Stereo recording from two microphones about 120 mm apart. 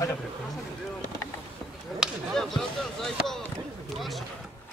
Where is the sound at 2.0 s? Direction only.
Centre (ahead or behind).